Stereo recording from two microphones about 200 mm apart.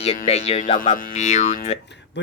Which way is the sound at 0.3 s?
30° left (ahead or behind).